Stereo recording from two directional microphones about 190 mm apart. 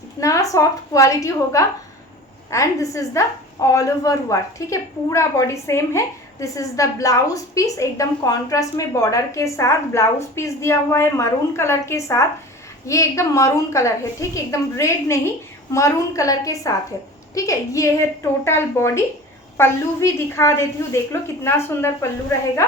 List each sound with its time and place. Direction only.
0.2 s a woman's voice: 15° left (ahead or behind)